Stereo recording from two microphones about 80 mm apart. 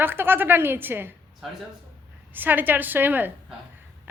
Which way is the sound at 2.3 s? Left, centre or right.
Right.